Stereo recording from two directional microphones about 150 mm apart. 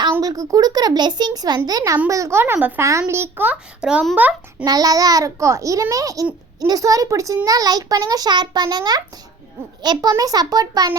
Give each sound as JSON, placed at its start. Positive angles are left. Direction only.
{"t": 0.1, "sound": "a child's voice", "side_deg": -25}
{"t": 4.6, "sound": "a child's voice", "side_deg": -25}